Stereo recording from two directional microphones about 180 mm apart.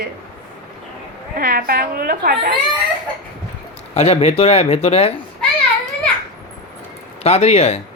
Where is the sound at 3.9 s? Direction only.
35° left (ahead or behind).